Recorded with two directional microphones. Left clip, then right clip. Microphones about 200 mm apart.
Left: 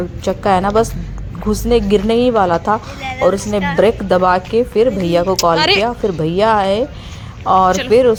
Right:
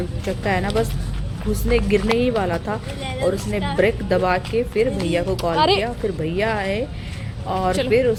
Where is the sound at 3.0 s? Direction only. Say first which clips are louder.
Left 6 dB; 30° left (ahead or behind).